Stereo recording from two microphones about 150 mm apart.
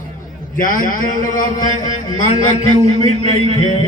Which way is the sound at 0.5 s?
65° left (ahead or behind).